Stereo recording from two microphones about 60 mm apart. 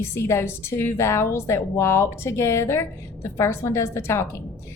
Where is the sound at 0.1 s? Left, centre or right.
Left.